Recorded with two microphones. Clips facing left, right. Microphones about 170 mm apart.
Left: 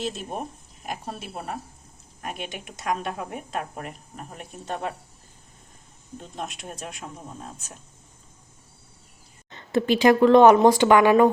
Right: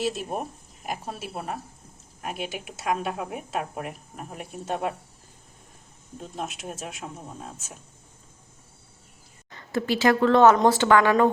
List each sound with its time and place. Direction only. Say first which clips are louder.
0.0 s speech: right 2 dB; 5° right (ahead or behind)
6.1 s speech: right 1 dB; centre (ahead or behind)
9.5 s speech: left 4 dB; 20° left (ahead or behind)